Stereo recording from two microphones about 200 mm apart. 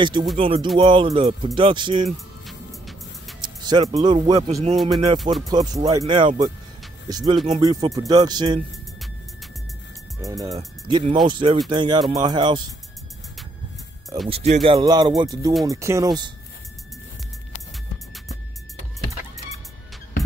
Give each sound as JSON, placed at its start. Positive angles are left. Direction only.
{"t": 0.0, "sound": "speech", "side_deg": -25}
{"t": 2.4, "sound": "music", "side_deg": 0}
{"t": 3.3, "sound": "speech", "side_deg": -20}
{"t": 4.7, "sound": "music", "side_deg": 0}
{"t": 5.5, "sound": "speech", "side_deg": -20}
{"t": 10.4, "sound": "speech", "side_deg": -20}
{"t": 14.3, "sound": "speech", "side_deg": -30}